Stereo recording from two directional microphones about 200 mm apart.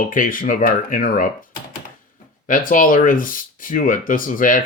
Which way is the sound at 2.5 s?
40° left (ahead or behind).